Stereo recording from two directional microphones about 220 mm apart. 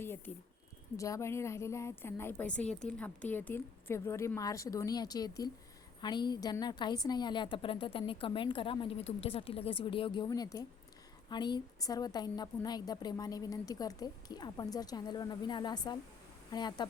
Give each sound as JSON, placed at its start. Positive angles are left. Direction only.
{"t": 0.3, "sound": "a woman's voice", "side_deg": 5}